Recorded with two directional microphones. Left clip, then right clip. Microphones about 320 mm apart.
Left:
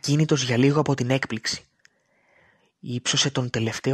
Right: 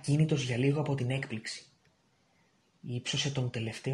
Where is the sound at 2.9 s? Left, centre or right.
Left.